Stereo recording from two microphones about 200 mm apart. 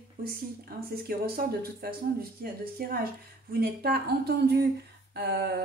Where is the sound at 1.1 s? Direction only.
45° right (ahead or behind).